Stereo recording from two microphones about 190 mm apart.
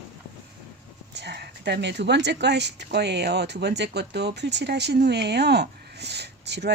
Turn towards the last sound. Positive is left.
turn(degrees=-60)  # may be behind; listen again after turning